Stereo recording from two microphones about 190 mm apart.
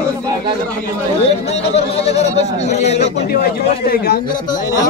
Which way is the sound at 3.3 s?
50° left (ahead or behind).